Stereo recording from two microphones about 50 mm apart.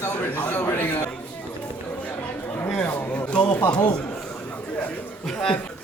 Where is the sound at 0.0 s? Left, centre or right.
Left.